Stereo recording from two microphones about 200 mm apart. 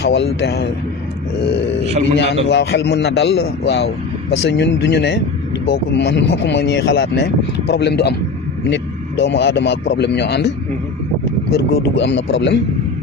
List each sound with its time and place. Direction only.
0.0 s a man's voice: 60° left (ahead or behind)
1.9 s a man's voice: 35° right (ahead or behind)
2.1 s a man's voice: 55° left (ahead or behind)
11.5 s a man's voice: 60° left (ahead or behind)